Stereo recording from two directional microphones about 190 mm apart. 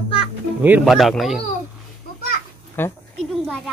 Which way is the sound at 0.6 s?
5° right (ahead or behind).